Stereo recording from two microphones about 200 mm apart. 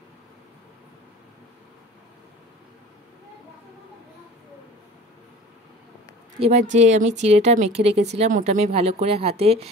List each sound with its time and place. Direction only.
6.4 s speech: 35° right (ahead or behind)